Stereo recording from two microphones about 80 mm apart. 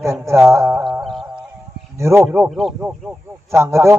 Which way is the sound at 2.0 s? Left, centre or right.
Right.